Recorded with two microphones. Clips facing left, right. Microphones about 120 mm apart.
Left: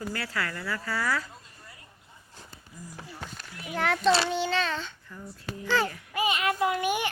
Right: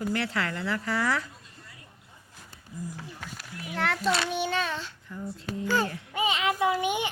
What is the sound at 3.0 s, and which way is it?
Speech, 25° left (ahead or behind).